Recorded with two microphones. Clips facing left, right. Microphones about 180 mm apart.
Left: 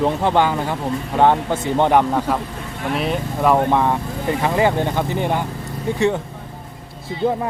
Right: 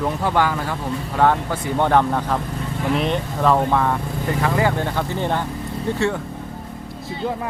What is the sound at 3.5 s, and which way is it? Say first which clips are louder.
Speech: left 3 dB; 20° left (ahead or behind).